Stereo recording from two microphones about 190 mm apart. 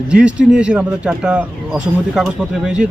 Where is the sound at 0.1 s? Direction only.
5° right (ahead or behind).